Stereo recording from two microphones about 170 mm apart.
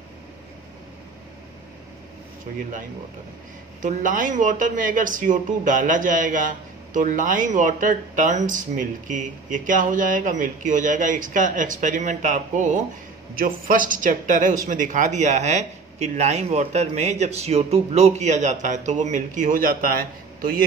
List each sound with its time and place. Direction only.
3.8 s speech: 50° right (ahead or behind)